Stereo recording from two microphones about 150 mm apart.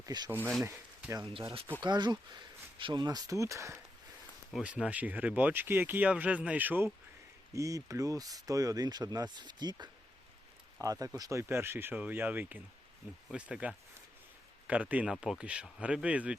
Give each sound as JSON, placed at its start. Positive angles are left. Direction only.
{"t": 0.0, "sound": "speech", "side_deg": -30}
{"t": 0.6, "sound": "speech", "side_deg": -10}
{"t": 1.1, "sound": "speech", "side_deg": -35}
{"t": 4.5, "sound": "speech", "side_deg": -5}